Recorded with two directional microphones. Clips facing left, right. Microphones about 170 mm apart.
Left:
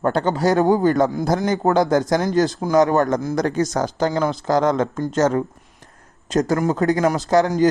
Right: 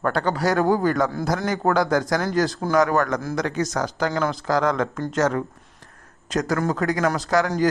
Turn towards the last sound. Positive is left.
turn(degrees=20)  # may be behind; listen again after turning